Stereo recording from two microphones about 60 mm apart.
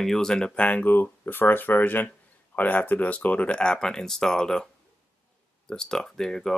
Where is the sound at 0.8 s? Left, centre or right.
Left.